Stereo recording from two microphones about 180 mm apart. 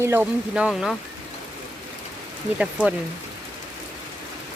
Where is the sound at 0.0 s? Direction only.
10° right (ahead or behind).